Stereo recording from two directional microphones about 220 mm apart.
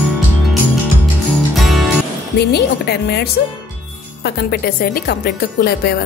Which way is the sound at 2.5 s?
45° left (ahead or behind).